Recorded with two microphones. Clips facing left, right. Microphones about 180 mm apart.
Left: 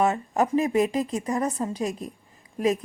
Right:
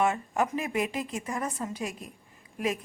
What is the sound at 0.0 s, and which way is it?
Speech, 35° left (ahead or behind).